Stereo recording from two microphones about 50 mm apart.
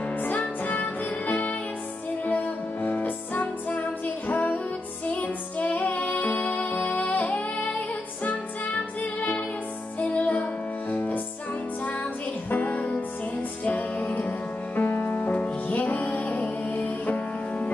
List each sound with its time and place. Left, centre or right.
0.4 s music: left
12.4 s music: left